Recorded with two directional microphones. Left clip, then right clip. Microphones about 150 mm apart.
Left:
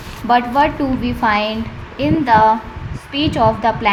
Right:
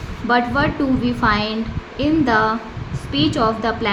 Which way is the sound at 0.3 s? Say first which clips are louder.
Left 4 dB; 25° left (ahead or behind).